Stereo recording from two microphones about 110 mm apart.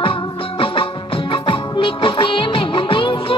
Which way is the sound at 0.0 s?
55° left (ahead or behind).